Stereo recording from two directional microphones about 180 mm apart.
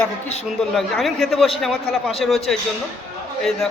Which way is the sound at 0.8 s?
Centre (ahead or behind).